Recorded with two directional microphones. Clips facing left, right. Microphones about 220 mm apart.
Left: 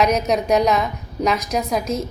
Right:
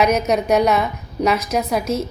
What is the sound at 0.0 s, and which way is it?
A woman's voice, 5° right (ahead or behind).